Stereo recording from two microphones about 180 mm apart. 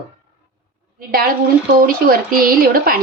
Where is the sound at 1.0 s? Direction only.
55° right (ahead or behind).